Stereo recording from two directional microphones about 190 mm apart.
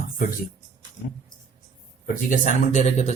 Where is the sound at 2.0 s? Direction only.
45° left (ahead or behind).